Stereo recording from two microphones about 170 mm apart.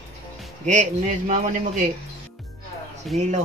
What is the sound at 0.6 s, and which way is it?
Speech, 45° right (ahead or behind).